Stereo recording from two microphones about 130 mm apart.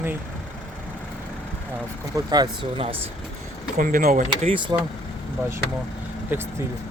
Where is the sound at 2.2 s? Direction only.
30° right (ahead or behind).